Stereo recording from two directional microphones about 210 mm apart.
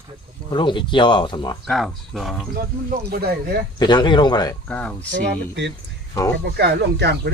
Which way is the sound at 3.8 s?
20° left (ahead or behind).